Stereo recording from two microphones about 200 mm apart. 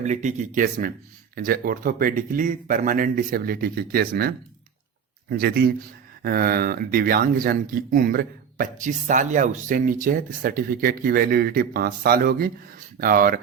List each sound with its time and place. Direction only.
0.0 s speech: 35° right (ahead or behind)